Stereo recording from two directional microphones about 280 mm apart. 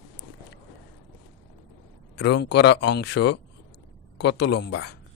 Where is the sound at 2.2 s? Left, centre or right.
Left.